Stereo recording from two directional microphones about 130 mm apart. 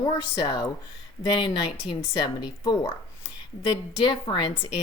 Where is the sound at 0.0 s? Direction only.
30° left (ahead or behind).